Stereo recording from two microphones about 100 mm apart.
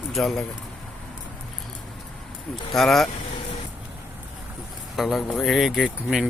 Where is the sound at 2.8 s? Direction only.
5° left (ahead or behind).